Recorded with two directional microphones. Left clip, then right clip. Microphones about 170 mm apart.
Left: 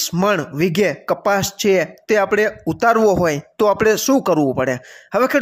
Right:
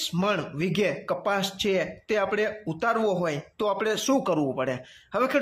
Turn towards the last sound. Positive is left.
turn(degrees=35)  # may be behind; listen again after turning